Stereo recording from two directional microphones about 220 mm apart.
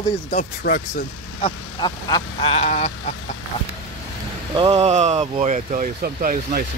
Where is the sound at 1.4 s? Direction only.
20° left (ahead or behind).